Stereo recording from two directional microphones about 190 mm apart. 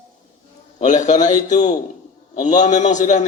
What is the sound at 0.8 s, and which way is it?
A man's voice, 40° left (ahead or behind).